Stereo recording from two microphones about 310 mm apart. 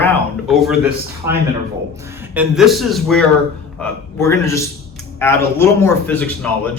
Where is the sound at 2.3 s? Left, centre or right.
Centre.